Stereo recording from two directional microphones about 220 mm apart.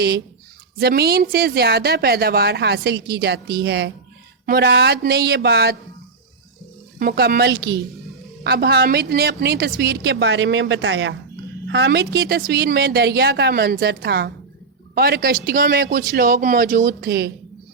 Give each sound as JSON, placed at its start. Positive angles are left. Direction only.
{"t": 0.8, "sound": "a woman's voice", "side_deg": -45}
{"t": 7.0, "sound": "a woman's voice", "side_deg": -45}